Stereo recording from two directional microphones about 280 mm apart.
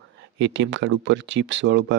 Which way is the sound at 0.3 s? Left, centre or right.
Right.